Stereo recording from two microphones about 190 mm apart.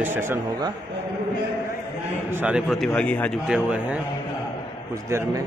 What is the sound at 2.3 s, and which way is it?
A man's voice, 5° right (ahead or behind).